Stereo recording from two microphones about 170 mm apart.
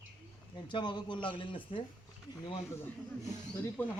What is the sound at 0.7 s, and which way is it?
Speech, 25° left (ahead or behind).